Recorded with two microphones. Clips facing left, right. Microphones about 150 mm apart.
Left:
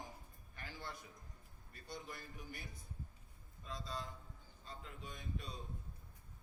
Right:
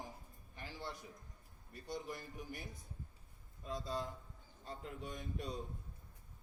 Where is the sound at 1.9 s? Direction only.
15° right (ahead or behind).